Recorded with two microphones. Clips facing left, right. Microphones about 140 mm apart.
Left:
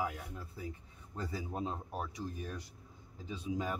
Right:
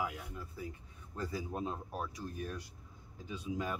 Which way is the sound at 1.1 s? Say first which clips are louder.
Right 1 dB; 25° left (ahead or behind).